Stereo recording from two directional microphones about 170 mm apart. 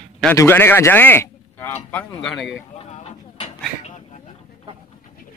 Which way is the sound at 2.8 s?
40° left (ahead or behind).